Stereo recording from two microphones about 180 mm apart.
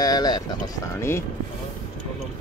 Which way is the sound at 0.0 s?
20° left (ahead or behind).